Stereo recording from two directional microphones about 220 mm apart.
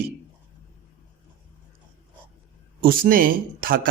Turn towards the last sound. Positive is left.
turn(degrees=-40)  # may be behind; listen again after turning